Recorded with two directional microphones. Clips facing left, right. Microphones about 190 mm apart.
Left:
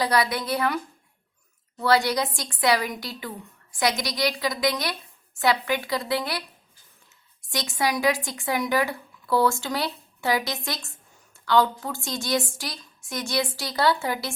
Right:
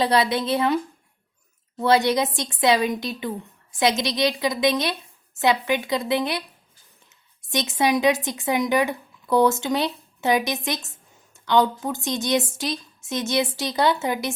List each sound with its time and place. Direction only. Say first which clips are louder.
0.0 s a woman's voice: right 3 dB; 25° right (ahead or behind)
1.8 s a woman's voice: right 3 dB; 20° right (ahead or behind)
7.5 s a woman's voice: right 5 dB; 20° right (ahead or behind)